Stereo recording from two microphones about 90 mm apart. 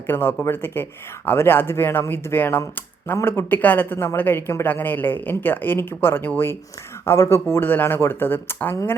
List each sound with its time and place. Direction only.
0.1 s speech: 25° left (ahead or behind)